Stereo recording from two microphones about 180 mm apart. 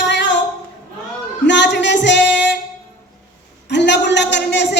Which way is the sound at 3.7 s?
75° left (ahead or behind).